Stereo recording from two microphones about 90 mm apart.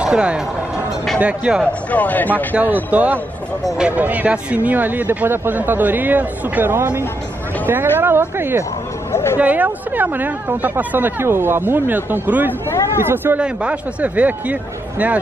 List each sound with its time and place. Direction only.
0.0 s speech: 10° right (ahead or behind)
1.6 s speech: 15° left (ahead or behind)
2.5 s speech: 15° right (ahead or behind)
9.1 s speech: 30° left (ahead or behind)
9.4 s speech: 15° right (ahead or behind)
13.4 s speech: 10° right (ahead or behind)